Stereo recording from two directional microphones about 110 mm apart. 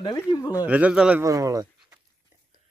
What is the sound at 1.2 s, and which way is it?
Speech, 30° right (ahead or behind).